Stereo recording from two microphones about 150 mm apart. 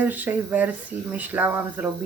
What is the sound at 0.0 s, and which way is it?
Speech, 10° right (ahead or behind).